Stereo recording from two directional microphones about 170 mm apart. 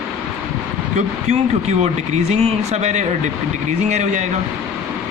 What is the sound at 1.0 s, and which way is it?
Speech, 40° right (ahead or behind).